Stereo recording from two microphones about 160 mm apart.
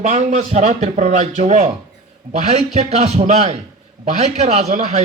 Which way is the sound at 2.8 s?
40° right (ahead or behind).